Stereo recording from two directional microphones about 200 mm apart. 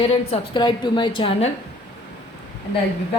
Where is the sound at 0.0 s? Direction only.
30° left (ahead or behind).